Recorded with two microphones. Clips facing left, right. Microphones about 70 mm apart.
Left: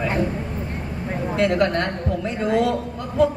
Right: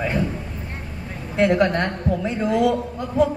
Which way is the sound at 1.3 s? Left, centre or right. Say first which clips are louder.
Right 2 dB; right.